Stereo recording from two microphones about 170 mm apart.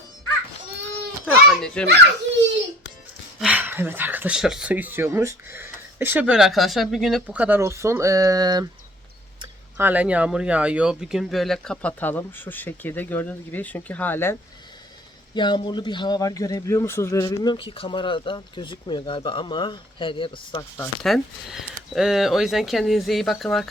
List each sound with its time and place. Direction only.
1.2 s baby cry: 5° left (ahead or behind)
3.4 s speech: 10° right (ahead or behind)
9.7 s speech: 10° right (ahead or behind); by 14.3 s 15° left (ahead or behind)
15.4 s a man's voice: 25° left (ahead or behind)
21.0 s speech: centre (ahead or behind)